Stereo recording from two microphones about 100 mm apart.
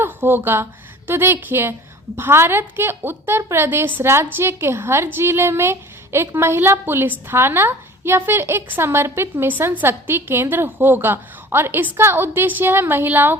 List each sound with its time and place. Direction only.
0.0 s a woman's voice: 20° right (ahead or behind)